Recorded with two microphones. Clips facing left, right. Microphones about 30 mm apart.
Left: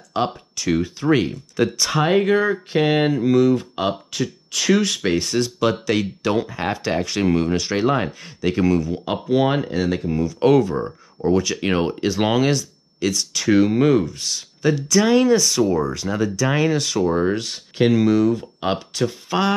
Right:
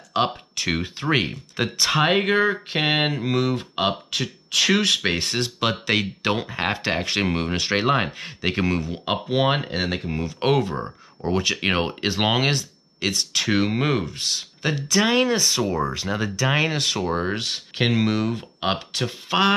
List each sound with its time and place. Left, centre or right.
0.1 s speech: right